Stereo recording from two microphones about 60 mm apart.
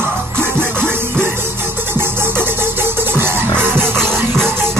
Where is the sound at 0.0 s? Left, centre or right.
Right.